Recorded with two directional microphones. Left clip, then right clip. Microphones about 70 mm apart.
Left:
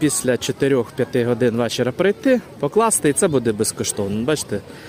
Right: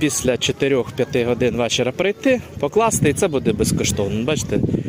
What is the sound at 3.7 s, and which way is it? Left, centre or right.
Speech, left.